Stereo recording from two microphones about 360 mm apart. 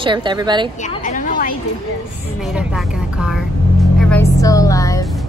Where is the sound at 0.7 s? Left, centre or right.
Centre.